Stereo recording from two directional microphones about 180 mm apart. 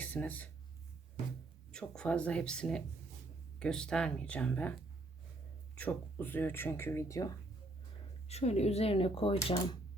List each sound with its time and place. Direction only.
0.0 s speech: 10° left (ahead or behind)
1.7 s speech: 5° left (ahead or behind)
8.3 s speech: 35° left (ahead or behind)